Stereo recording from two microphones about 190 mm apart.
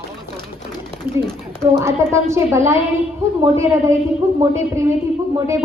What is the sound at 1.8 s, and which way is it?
A woman's voice, 15° right (ahead or behind).